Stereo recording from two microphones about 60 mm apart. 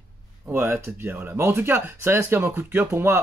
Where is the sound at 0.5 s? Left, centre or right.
Right.